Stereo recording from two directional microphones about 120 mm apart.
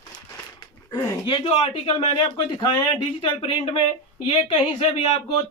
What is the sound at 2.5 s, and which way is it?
Speech, 40° left (ahead or behind).